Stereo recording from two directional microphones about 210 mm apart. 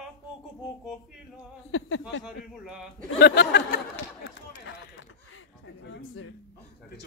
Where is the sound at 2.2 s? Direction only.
Centre (ahead or behind).